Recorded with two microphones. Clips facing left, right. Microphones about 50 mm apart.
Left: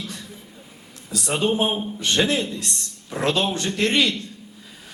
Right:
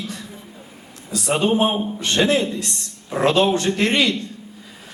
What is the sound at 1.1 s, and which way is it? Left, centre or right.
A man's voice, centre.